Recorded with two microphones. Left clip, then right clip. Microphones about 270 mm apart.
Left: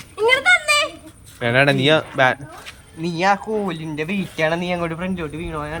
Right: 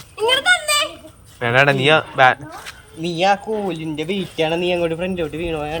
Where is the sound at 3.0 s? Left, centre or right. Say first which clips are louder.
Right 1 dB; left.